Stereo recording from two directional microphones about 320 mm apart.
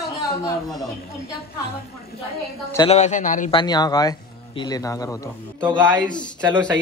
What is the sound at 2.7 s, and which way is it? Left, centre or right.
A man's voice, centre.